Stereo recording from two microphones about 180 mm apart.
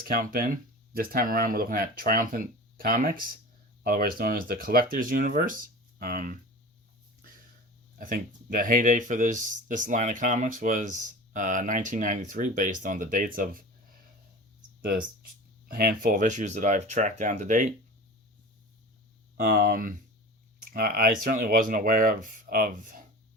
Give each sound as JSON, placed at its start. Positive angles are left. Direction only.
{"t": 0.0, "sound": "speech", "side_deg": -50}
{"t": 7.9, "sound": "speech", "side_deg": -50}
{"t": 14.8, "sound": "speech", "side_deg": -55}
{"t": 19.4, "sound": "speech", "side_deg": -55}